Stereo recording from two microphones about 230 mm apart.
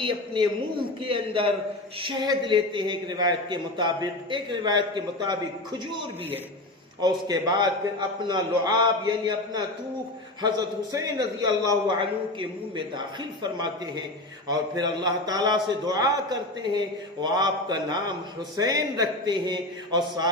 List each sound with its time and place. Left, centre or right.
1.0 s a man's voice: right
7.0 s a man's voice: centre
14.4 s a man's voice: centre